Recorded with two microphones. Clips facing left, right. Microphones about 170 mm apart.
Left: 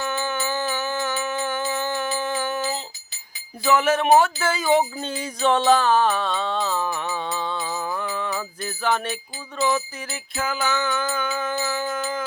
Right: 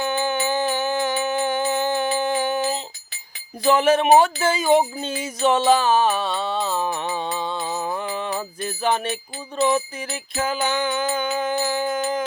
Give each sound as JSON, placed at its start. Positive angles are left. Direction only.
{"t": 0.0, "sound": "a sound", "side_deg": -30}
{"t": 1.5, "sound": "music", "side_deg": -30}
{"t": 4.8, "sound": "music", "side_deg": -10}